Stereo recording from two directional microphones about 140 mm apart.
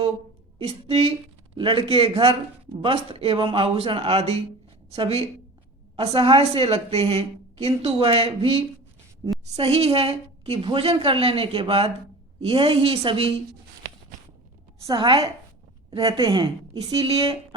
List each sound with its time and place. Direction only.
0.6 s a woman's voice: 45° right (ahead or behind)
14.8 s speech: 35° right (ahead or behind)
16.8 s a woman's voice: 45° right (ahead or behind)